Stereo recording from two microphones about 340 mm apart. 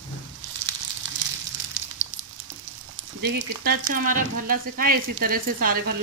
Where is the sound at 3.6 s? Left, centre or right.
Right.